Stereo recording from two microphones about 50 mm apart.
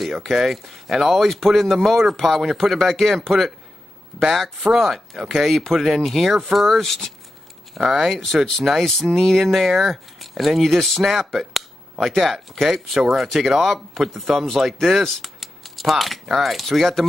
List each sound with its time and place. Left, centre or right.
0.0 s speech: centre